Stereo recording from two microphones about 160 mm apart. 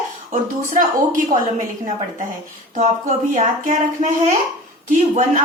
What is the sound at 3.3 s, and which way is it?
Speech, 55° right (ahead or behind).